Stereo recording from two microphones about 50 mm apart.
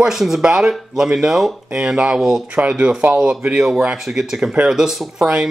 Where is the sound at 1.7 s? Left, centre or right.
Right.